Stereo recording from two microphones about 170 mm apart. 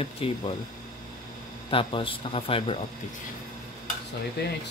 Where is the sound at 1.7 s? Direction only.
30° left (ahead or behind).